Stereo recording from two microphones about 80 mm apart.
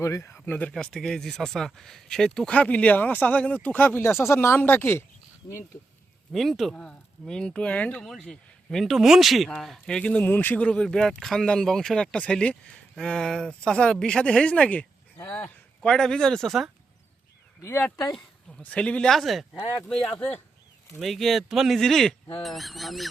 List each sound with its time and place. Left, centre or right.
0.0 s speech: left
0.4 s speech: centre
0.7 s speech: centre; by 5.0 s left
6.3 s speech: centre
6.8 s speech: centre
8.0 s speech: centre; by 15.5 s left
15.8 s speech: centre
17.6 s speech: left
18.0 s speech: centre
21.0 s speech: centre